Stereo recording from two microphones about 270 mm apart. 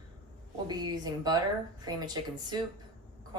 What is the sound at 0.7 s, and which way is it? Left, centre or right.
A woman's voice, centre.